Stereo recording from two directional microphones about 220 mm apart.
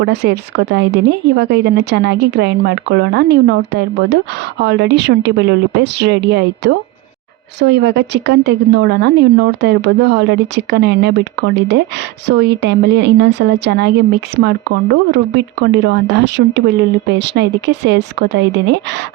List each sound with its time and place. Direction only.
0.0 s speech: 50° right (ahead or behind)